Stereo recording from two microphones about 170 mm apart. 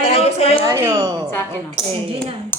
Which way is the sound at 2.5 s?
15° left (ahead or behind).